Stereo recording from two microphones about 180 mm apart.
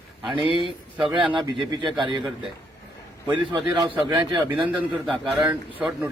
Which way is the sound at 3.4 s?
25° right (ahead or behind).